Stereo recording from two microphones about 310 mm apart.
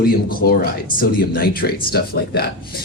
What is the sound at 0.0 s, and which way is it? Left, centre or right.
Speech, left.